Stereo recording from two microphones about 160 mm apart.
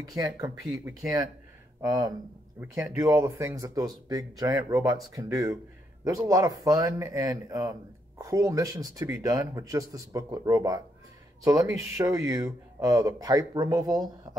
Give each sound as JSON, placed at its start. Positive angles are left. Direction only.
{"t": 0.0, "sound": "speech", "side_deg": -20}